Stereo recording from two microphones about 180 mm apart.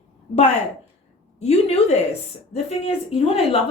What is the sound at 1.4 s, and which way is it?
Speech, 35° left (ahead or behind).